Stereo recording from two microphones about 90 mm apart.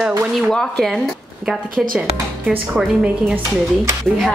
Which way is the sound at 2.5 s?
10° right (ahead or behind).